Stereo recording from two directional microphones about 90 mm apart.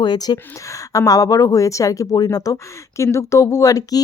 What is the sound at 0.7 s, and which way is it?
Speech, 40° left (ahead or behind).